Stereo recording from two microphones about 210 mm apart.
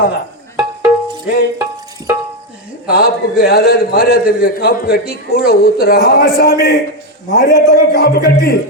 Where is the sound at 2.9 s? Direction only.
45° left (ahead or behind).